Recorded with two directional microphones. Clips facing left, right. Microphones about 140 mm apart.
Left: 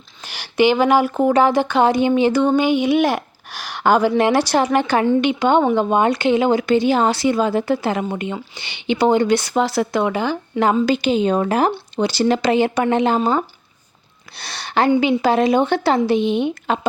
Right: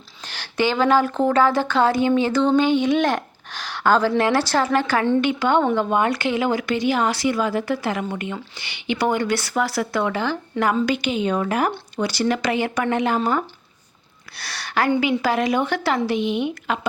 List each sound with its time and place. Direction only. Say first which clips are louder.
0.3 s speech: left 6 dB; 10° left (ahead or behind)
10.7 s a woman's voice: left 5 dB; 25° left (ahead or behind)